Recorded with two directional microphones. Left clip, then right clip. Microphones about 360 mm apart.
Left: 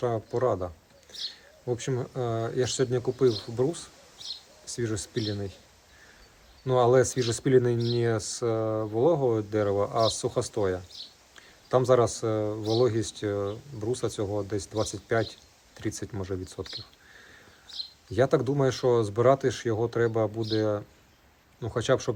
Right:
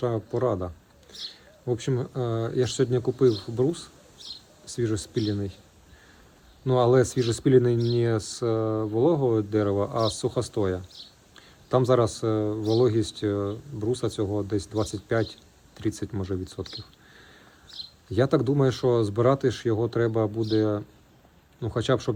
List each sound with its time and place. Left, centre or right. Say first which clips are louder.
0.0 s speech: right 1 dB; centre
1.1 s a sound: left 2 dB; right
1.6 s speech: right 2 dB; centre
6.7 s speech: right 1 dB; centre
18.1 s speech: right 1 dB; centre